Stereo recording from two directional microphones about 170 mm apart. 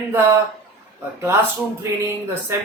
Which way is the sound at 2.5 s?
15° right (ahead or behind).